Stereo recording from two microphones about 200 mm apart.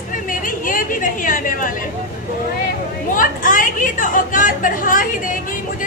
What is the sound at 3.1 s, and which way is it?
A woman's voice, 40° left (ahead or behind).